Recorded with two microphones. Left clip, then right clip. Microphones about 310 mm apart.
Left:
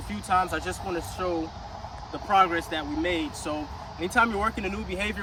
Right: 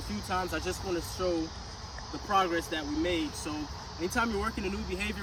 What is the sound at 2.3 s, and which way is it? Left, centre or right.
Speech, centre.